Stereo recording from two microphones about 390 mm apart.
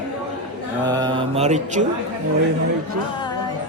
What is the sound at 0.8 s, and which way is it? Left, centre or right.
Speech, centre.